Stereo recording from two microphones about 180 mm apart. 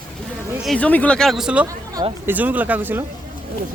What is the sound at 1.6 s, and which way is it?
Speech, 20° right (ahead or behind).